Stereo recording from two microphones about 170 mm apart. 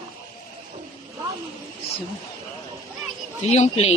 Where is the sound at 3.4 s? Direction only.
40° left (ahead or behind).